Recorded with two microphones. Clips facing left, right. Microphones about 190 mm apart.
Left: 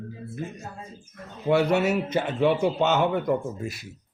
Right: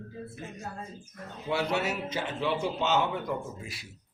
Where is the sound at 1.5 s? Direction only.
55° left (ahead or behind).